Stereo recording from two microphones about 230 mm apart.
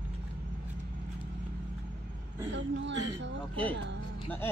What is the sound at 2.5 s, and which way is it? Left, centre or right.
Speech, right.